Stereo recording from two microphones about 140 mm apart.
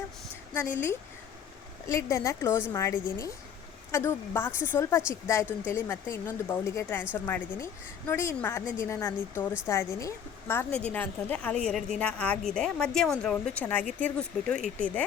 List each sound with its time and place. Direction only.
1.9 s a woman's voice: 20° left (ahead or behind)